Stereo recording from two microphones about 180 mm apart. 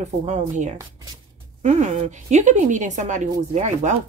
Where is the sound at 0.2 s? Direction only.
40° right (ahead or behind).